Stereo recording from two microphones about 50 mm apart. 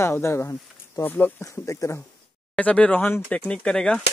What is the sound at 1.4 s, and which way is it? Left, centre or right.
Speech, left.